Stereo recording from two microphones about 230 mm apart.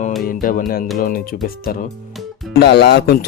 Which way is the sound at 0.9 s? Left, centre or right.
Left.